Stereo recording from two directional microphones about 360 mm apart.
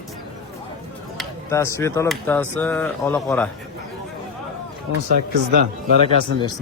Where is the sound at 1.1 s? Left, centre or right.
Centre.